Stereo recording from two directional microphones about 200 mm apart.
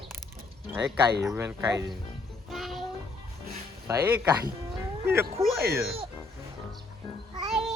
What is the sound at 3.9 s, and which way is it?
Speech, 10° right (ahead or behind).